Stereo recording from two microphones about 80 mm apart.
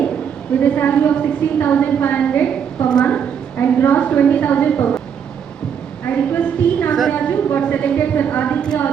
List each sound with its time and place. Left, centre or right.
0.6 s a woman's voice: left
3.6 s a woman's voice: left
6.3 s a sound: left
7.1 s a woman's voice: left